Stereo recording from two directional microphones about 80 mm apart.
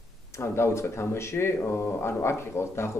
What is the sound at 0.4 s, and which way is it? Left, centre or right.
Speech, left.